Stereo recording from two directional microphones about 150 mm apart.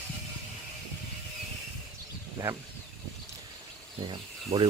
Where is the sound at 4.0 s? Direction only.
30° right (ahead or behind).